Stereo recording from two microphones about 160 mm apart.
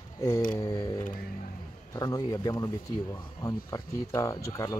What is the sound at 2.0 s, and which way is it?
Speech, 25° left (ahead or behind).